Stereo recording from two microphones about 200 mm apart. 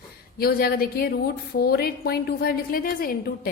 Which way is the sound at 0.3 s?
50° left (ahead or behind).